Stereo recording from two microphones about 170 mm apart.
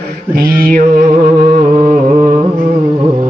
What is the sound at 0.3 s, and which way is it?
Mantra, 60° right (ahead or behind).